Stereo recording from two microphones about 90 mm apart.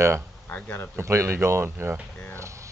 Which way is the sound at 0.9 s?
30° right (ahead or behind).